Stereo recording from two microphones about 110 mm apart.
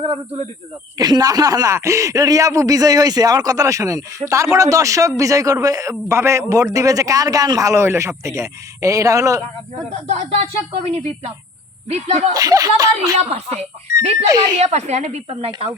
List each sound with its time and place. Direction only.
0.9 s speech: 35° right (ahead or behind)
9.9 s speech: 85° right
12.3 s speech: 35° right (ahead or behind)
13.1 s speech: 70° right (ahead or behind)
14.3 s speech: 35° right (ahead or behind)
14.6 s speech: 90° right; by 15.5 s 65° right (ahead or behind)